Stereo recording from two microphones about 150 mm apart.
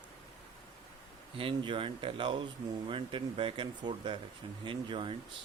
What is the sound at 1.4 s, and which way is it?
Speech, 35° right (ahead or behind).